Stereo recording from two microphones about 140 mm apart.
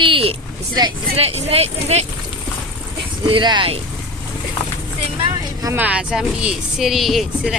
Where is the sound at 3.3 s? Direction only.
35° right (ahead or behind).